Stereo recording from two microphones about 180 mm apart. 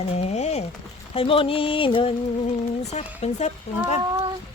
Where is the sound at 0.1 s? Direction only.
35° left (ahead or behind).